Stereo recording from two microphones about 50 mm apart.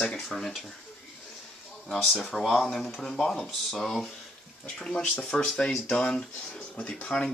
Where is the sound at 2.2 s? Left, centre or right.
Centre.